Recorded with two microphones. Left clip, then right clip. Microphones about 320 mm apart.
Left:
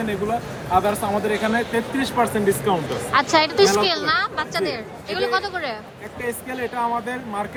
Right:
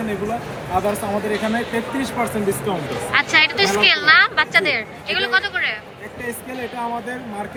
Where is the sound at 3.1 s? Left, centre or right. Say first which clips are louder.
Right 1 dB; left.